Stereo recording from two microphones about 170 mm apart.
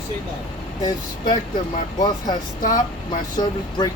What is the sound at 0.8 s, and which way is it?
Speech, 25° left (ahead or behind).